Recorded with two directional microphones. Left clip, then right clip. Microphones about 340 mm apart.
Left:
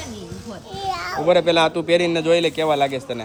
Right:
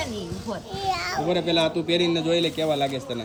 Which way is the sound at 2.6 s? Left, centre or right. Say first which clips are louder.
Left 5 dB; left.